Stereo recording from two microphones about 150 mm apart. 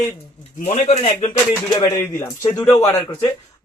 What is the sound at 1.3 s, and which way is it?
Speech, 25° left (ahead or behind).